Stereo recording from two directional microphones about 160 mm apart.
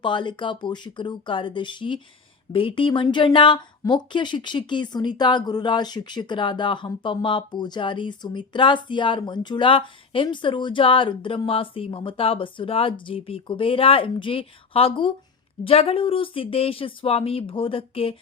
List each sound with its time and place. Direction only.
0.0 s speech: 30° left (ahead or behind)